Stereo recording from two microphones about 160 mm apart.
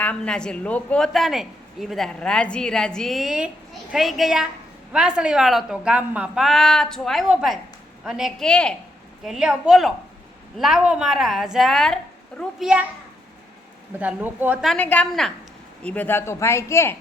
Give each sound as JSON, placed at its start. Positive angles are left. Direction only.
{"t": 0.0, "sound": "a woman's voice", "side_deg": 5}
{"t": 14.0, "sound": "speech", "side_deg": -10}
{"t": 14.6, "sound": "a woman's voice", "side_deg": 5}